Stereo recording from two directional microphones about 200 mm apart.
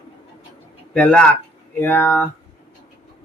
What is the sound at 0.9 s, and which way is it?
Speech, 5° left (ahead or behind).